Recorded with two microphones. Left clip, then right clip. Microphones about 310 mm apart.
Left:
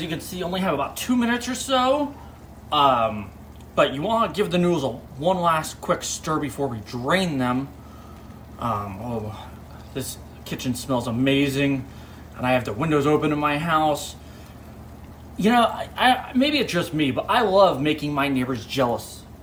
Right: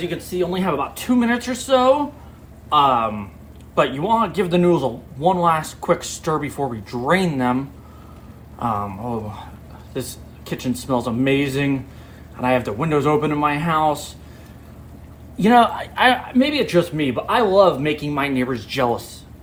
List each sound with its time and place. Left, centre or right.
0.0 s a man's voice: right
15.4 s a man's voice: right